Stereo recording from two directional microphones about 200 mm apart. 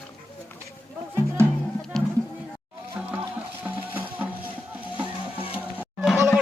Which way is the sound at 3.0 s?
5° right (ahead or behind).